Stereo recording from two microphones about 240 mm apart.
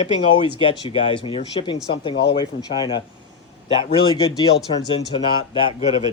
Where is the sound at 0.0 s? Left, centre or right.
Left.